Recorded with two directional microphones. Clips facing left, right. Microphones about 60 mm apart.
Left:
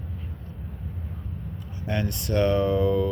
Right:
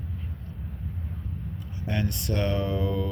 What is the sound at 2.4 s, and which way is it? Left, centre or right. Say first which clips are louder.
Speech: left 7 dB; centre.